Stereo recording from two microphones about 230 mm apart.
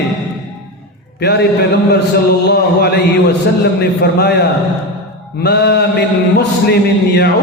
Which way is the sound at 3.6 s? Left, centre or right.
Left.